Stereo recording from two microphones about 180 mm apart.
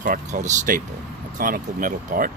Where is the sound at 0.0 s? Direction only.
45° right (ahead or behind).